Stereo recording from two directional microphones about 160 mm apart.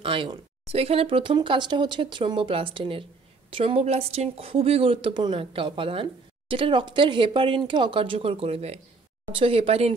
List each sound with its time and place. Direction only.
0.0 s speech: 30° right (ahead or behind)